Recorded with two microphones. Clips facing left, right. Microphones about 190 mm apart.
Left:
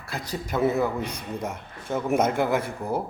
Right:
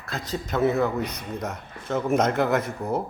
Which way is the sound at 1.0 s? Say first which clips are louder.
Right 2 dB; 30° left (ahead or behind).